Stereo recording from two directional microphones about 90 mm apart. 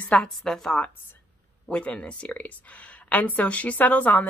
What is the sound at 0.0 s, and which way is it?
A woman's voice, 15° left (ahead or behind).